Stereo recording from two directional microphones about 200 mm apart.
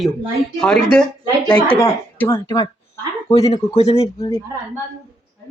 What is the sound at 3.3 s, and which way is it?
Speech, 30° left (ahead or behind).